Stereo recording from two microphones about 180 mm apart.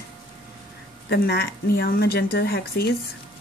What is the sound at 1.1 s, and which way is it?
A woman's voice, 60° left (ahead or behind).